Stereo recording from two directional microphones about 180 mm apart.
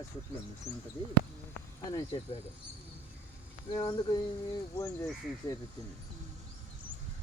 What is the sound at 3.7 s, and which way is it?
Speech, 25° left (ahead or behind).